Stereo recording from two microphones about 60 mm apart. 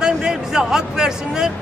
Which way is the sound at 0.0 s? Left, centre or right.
Centre.